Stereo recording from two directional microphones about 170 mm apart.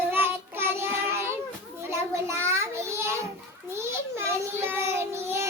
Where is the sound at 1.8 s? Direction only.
15° right (ahead or behind).